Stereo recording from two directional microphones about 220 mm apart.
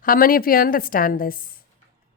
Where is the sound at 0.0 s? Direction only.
40° left (ahead or behind).